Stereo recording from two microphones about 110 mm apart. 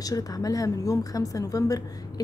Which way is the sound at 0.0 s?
35° left (ahead or behind).